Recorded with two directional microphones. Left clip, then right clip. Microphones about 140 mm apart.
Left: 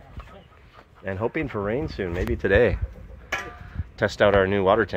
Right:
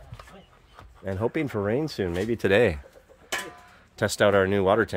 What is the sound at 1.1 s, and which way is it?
Speech, 30° right (ahead or behind).